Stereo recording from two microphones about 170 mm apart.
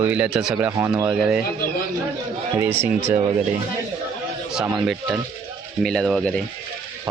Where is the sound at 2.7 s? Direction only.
15° right (ahead or behind).